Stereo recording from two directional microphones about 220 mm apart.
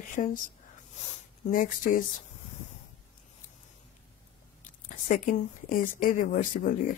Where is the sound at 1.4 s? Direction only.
40° left (ahead or behind).